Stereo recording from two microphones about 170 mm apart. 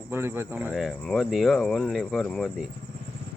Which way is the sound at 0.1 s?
15° right (ahead or behind).